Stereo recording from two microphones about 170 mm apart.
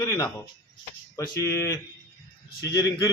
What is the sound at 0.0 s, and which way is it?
A man's voice, 25° left (ahead or behind).